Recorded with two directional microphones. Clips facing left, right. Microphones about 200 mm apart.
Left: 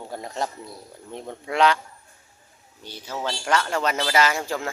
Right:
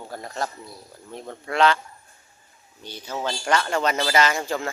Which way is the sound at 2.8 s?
10° left (ahead or behind).